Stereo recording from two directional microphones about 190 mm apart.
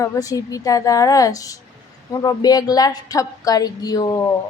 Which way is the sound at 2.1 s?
20° left (ahead or behind).